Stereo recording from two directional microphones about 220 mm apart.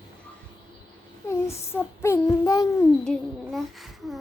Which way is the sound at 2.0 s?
15° left (ahead or behind).